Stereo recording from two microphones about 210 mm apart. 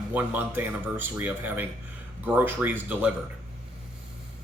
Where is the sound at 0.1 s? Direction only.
10° right (ahead or behind).